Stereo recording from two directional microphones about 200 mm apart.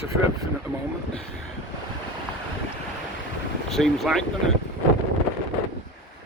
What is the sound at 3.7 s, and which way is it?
Speech, centre (ahead or behind).